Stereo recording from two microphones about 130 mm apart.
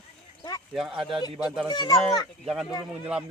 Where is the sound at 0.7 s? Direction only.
5° right (ahead or behind).